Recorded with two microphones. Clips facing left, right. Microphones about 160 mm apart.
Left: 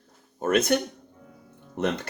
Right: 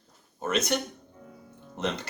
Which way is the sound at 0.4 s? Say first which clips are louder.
Left 5 dB; 50° left (ahead or behind).